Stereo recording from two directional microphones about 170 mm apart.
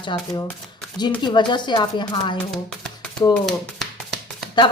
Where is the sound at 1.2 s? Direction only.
25° left (ahead or behind).